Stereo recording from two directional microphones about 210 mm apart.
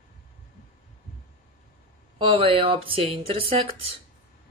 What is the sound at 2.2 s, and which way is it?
Speech, 25° right (ahead or behind).